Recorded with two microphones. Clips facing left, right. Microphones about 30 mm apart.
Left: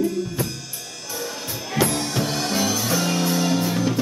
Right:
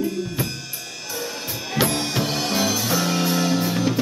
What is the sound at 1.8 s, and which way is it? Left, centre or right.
Music, centre.